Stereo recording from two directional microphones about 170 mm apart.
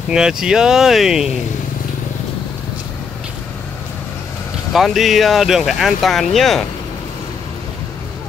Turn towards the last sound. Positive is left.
turn(degrees=0)  # may be behind; listen again after turning